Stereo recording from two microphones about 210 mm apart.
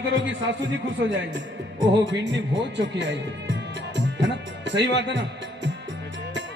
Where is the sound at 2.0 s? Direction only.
55° right (ahead or behind).